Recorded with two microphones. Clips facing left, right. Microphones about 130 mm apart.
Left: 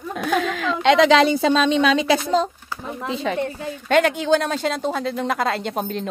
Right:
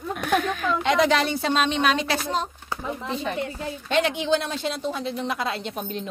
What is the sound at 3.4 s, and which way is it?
Speech, 50° left (ahead or behind).